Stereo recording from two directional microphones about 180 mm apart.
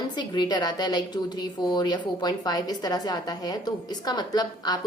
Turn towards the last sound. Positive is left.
turn(degrees=20)  # may be behind; listen again after turning